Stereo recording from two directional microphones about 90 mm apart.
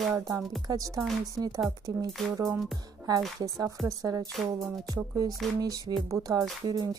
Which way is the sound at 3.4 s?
35° right (ahead or behind).